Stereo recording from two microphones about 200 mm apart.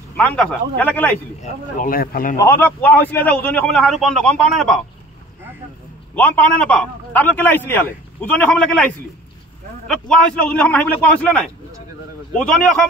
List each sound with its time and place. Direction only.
0.2 s a man's voice: 5° left (ahead or behind)
1.4 s speech: 45° left (ahead or behind)
2.3 s a man's voice: 10° left (ahead or behind)
6.1 s a man's voice: 5° left (ahead or behind)